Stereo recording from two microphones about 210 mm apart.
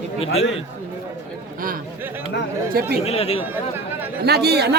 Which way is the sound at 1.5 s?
40° right (ahead or behind).